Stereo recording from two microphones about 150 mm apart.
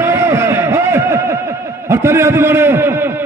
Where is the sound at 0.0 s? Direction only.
15° right (ahead or behind).